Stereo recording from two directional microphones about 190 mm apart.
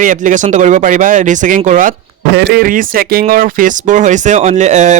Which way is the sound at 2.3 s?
55° right (ahead or behind).